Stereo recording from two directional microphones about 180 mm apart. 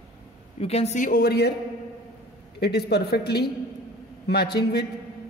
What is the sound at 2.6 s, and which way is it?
Speech, 65° left (ahead or behind).